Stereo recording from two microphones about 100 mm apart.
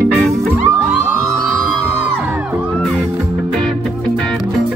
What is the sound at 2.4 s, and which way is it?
Music, 15° right (ahead or behind).